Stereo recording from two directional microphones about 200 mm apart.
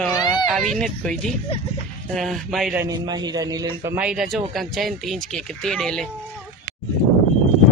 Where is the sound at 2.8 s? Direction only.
20° right (ahead or behind); by 6.1 s 5° left (ahead or behind).